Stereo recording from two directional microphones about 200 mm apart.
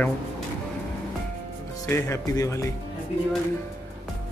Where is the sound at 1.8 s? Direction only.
15° left (ahead or behind).